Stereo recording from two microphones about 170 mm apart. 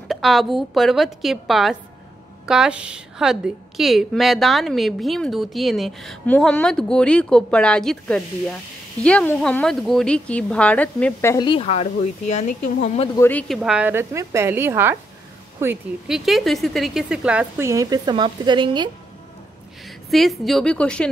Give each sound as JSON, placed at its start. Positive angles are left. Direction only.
{"t": 0.1, "sound": "a woman's voice", "side_deg": 0}
{"t": 11.4, "sound": "speech", "side_deg": 35}
{"t": 13.2, "sound": "speech", "side_deg": 10}
{"t": 13.6, "sound": "speech", "side_deg": -5}
{"t": 16.1, "sound": "speech", "side_deg": 0}
{"t": 20.1, "sound": "a woman's voice", "side_deg": 0}